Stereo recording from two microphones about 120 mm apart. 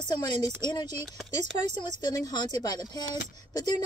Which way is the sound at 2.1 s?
30° left (ahead or behind).